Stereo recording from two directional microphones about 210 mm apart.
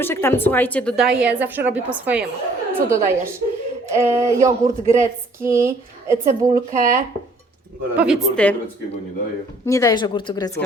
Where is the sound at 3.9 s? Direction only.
15° right (ahead or behind).